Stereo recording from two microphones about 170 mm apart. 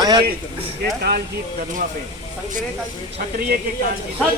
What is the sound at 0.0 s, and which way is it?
Speech, 25° right (ahead or behind).